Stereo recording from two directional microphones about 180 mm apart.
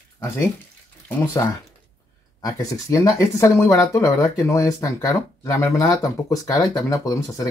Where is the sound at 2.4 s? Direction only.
20° left (ahead or behind).